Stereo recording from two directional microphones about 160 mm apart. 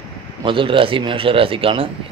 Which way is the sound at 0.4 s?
30° right (ahead or behind).